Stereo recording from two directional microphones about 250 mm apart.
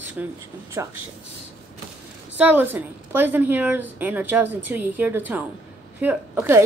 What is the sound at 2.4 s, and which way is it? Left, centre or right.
A woman's voice, centre.